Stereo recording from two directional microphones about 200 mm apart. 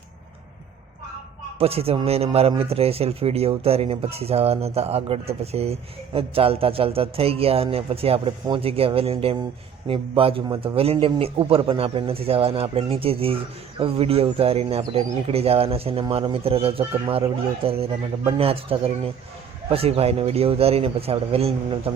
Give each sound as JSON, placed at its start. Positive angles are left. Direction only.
{"t": 1.5, "sound": "a man's voice", "side_deg": -30}